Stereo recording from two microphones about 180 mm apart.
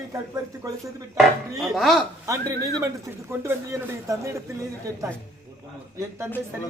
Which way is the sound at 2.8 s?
15° right (ahead or behind).